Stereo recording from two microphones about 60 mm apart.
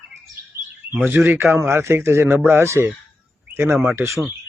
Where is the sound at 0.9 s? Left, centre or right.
Right.